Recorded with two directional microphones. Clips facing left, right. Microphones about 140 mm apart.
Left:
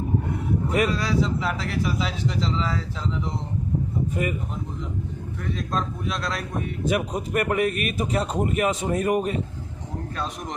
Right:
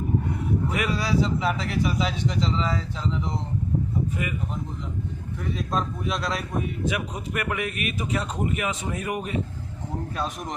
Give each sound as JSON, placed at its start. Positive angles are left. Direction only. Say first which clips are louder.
{"t": 0.9, "sound": "speech", "louder": "even", "side_deg": 0}
{"t": 4.2, "sound": "speech", "louder": "left 5 dB", "side_deg": 40}
{"t": 5.5, "sound": "speech", "louder": "right 1 dB", "side_deg": 0}
{"t": 6.8, "sound": "a man's voice", "louder": "left 4 dB", "side_deg": 40}